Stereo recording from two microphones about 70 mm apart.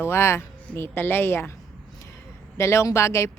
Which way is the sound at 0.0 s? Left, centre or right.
Left.